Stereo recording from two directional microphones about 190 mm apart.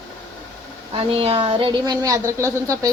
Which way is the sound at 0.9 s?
30° right (ahead or behind).